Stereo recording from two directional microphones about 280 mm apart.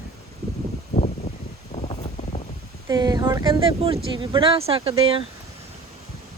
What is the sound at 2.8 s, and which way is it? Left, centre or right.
Speech, centre.